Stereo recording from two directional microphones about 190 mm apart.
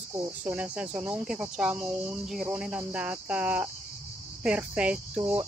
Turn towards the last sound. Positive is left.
turn(degrees=-5)  # may be behind; listen again after turning